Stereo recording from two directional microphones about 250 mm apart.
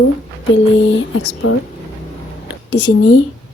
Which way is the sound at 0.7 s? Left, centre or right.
Left.